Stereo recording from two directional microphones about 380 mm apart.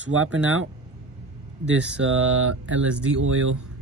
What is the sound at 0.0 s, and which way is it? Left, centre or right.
Speech, right.